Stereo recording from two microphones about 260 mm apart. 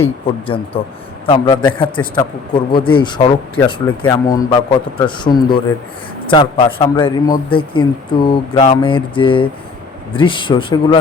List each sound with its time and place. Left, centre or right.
0.0 s a man's voice: left